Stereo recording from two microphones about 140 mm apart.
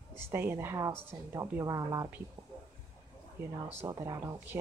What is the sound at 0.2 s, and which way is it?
A woman's voice, 15° right (ahead or behind).